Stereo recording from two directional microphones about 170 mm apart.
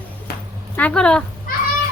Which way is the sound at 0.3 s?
65° left (ahead or behind).